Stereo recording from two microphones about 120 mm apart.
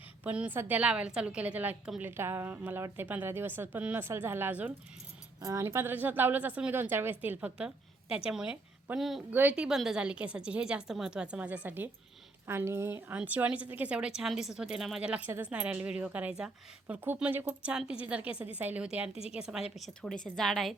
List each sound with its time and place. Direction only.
0.3 s a woman's voice: 10° right (ahead or behind)
5.4 s a woman's voice: 25° right (ahead or behind); by 9.2 s centre (ahead or behind)
9.3 s a woman's voice: 15° right (ahead or behind)
19.8 s a woman's voice: 5° left (ahead or behind)